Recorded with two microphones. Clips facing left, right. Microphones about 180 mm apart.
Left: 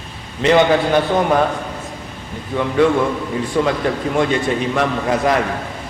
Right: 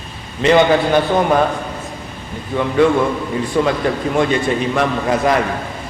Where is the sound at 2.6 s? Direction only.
20° right (ahead or behind).